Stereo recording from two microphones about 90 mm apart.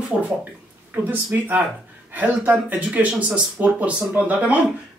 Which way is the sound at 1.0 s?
20° right (ahead or behind).